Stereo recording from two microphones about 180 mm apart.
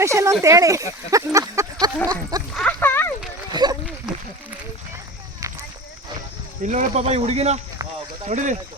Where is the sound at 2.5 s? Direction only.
5° left (ahead or behind).